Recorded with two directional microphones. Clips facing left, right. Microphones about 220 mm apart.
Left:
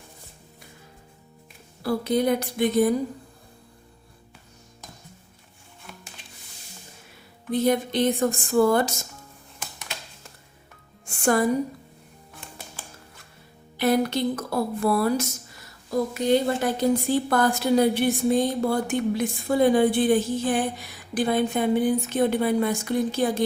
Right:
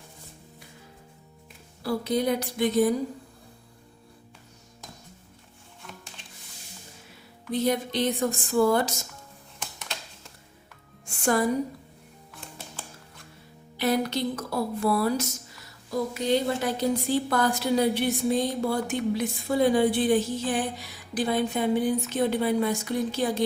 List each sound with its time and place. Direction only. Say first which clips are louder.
1.8 s a woman's voice: left 3 dB; 50° left (ahead or behind)
7.5 s a woman's voice: left 3 dB; 50° left (ahead or behind)
11.0 s music: left 3 dB; 50° left (ahead or behind)
13.7 s a woman's voice: left 3 dB; 50° left (ahead or behind)